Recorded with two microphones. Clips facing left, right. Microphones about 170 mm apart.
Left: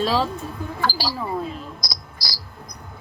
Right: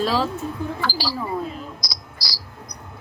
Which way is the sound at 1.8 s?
50° left (ahead or behind).